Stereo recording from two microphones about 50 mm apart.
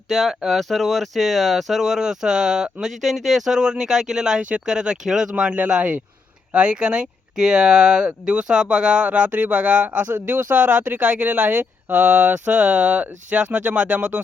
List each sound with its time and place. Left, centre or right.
0.1 s speech: centre; by 14.2 s right